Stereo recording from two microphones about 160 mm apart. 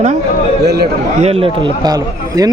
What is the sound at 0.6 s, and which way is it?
Speech, 85° right.